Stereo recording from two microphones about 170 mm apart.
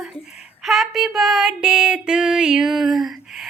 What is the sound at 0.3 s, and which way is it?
Female singing, 5° right (ahead or behind).